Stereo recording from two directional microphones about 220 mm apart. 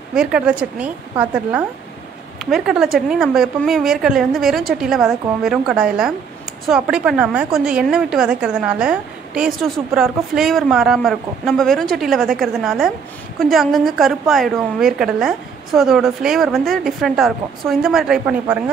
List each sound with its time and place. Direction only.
0.1 s a woman's voice: 5° right (ahead or behind)